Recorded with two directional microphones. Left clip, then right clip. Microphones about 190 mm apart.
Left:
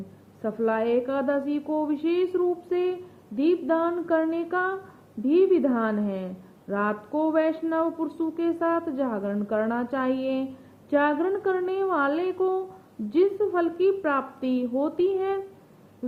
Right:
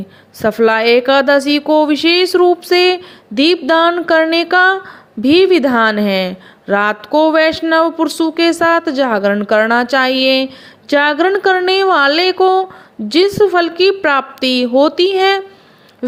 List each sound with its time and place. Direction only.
0.4 s a woman's voice: 45° right (ahead or behind)